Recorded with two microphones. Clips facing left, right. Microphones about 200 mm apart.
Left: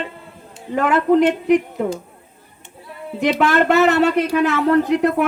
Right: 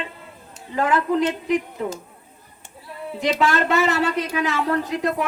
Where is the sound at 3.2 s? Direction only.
60° left (ahead or behind).